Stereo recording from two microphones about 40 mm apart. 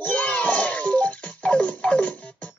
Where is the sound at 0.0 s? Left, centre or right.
Left.